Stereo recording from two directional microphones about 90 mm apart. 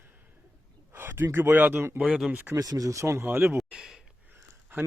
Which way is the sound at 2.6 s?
40° right (ahead or behind).